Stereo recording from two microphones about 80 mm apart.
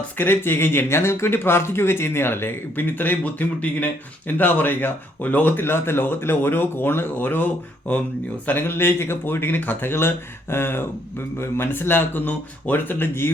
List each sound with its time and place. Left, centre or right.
0.2 s speech: left